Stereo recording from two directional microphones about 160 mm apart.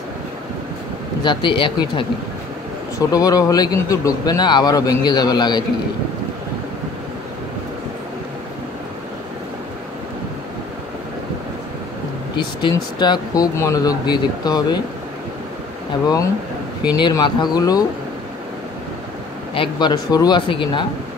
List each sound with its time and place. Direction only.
1.2 s speech: 30° left (ahead or behind)
3.1 s speech: 20° left (ahead or behind)
12.4 s speech: 30° left (ahead or behind)
16.8 s speech: 25° left (ahead or behind)
19.5 s speech: 30° left (ahead or behind)